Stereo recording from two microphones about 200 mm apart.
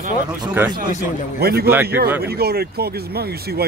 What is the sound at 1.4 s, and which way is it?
Speech, 50° right (ahead or behind).